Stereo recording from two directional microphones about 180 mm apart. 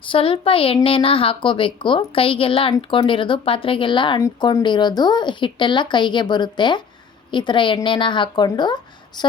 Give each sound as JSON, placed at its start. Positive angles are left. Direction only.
{"t": 0.0, "sound": "a woman's voice", "side_deg": 30}